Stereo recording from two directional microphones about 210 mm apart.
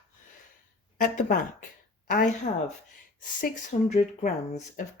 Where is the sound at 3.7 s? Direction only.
35° left (ahead or behind).